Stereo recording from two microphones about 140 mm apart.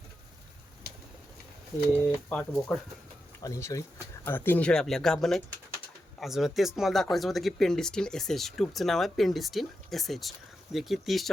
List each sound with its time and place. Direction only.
1.9 s speech: 5° left (ahead or behind)
3.4 s speech: 25° left (ahead or behind); by 11.3 s centre (ahead or behind)